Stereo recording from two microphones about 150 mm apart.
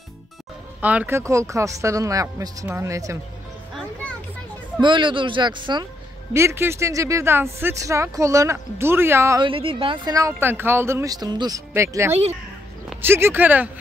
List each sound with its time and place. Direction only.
0.7 s speech: 10° right (ahead or behind)
4.7 s speech: 30° right (ahead or behind)
6.3 s speech: 15° right (ahead or behind)
9.4 s speech: 35° right (ahead or behind); by 13.7 s 10° right (ahead or behind)